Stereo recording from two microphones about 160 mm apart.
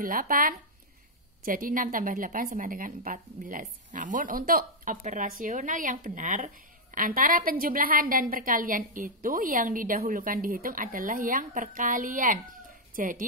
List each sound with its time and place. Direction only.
0.0 s a woman's voice: 60° right (ahead or behind)